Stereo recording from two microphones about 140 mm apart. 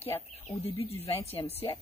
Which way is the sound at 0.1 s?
35° left (ahead or behind).